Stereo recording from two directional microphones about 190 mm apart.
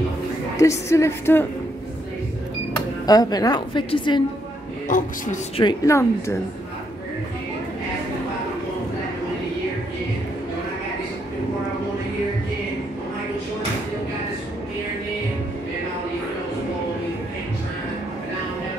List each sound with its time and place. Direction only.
0.6 s a woman's voice: 15° left (ahead or behind)
3.1 s a woman's voice: 20° left (ahead or behind)
4.8 s speech: 45° left (ahead or behind)
5.6 s a woman's voice: 20° left (ahead or behind)